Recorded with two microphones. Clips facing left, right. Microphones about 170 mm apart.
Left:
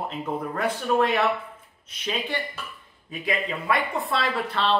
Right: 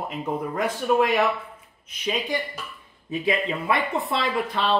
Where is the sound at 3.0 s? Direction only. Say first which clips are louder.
Right 4 dB; 20° right (ahead or behind).